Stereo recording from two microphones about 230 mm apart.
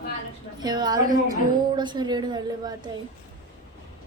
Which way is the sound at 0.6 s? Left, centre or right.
Centre.